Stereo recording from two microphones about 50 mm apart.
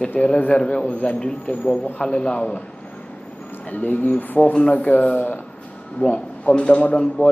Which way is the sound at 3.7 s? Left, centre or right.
Left.